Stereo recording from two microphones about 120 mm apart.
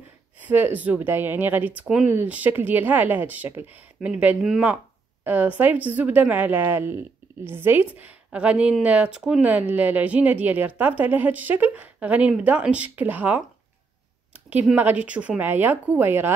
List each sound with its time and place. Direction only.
0.5 s a woman's voice: 15° right (ahead or behind)